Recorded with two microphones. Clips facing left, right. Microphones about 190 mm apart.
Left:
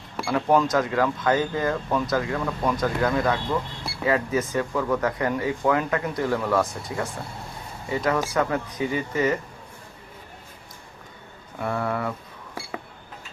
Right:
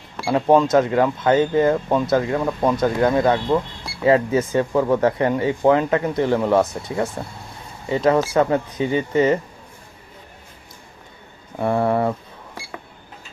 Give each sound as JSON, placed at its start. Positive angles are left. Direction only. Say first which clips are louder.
{"t": 0.3, "sound": "speech", "louder": "right 5 dB", "side_deg": -25}
{"t": 11.6, "sound": "speech", "louder": "right 8 dB", "side_deg": -30}